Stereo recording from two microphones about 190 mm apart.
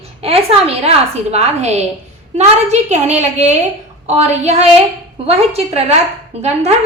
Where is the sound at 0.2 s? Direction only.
30° right (ahead or behind).